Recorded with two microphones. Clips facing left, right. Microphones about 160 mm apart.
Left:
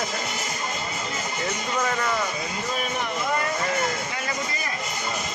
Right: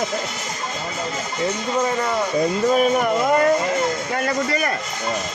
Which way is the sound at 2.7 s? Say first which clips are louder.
Right 11 dB; 45° right (ahead or behind).